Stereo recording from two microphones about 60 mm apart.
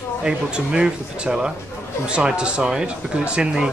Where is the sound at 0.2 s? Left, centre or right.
Centre.